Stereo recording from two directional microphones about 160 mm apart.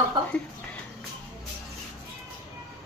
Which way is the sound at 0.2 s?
30° right (ahead or behind).